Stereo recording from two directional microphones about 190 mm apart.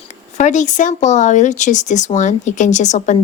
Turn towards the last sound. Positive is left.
turn(degrees=40)  # may be behind; listen again after turning